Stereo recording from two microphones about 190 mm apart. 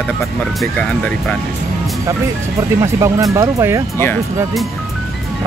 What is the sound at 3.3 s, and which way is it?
Speech, 15° right (ahead or behind).